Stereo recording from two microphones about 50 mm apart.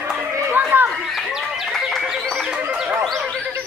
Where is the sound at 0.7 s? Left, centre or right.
Right.